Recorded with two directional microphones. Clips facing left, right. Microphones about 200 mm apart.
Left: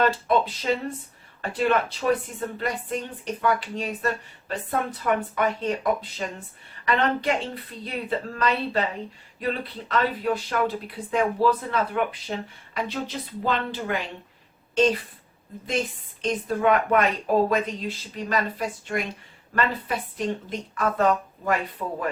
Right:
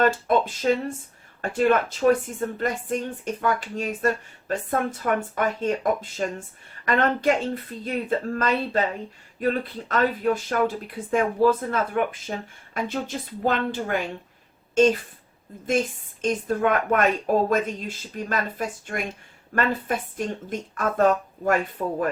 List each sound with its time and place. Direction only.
0.0 s speech: 50° right (ahead or behind)
16.2 s speech: 45° right (ahead or behind)